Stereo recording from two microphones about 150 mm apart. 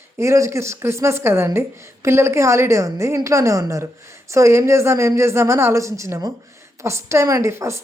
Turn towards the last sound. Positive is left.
turn(degrees=-20)  # may be behind; listen again after turning